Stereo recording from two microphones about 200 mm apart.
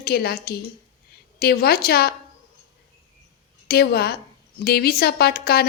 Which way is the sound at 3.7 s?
50° left (ahead or behind).